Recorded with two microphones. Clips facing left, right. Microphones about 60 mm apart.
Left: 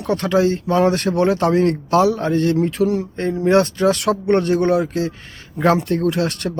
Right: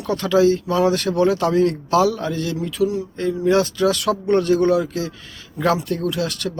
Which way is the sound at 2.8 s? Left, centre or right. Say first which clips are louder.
Left 1 dB; left.